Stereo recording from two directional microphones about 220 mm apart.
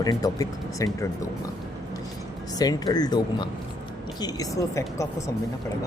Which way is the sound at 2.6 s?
15° left (ahead or behind).